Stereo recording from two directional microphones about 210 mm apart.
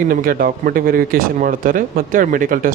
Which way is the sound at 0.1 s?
40° right (ahead or behind).